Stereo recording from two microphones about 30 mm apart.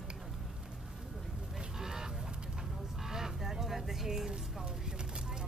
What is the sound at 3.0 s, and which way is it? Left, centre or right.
Sheep, centre.